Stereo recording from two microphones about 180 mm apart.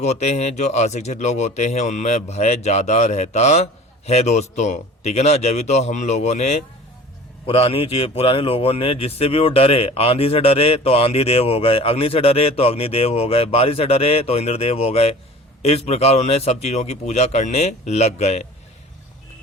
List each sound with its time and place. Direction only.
0.0 s a man's voice: 40° left (ahead or behind)